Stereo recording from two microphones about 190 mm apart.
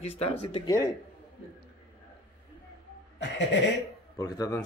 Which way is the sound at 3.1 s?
70° left (ahead or behind).